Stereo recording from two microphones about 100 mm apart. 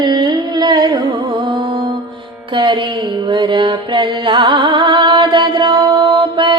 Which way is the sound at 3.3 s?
50° right (ahead or behind).